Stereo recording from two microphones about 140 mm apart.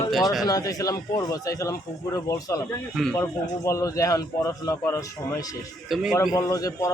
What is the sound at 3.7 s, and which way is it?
A man's voice, 25° left (ahead or behind).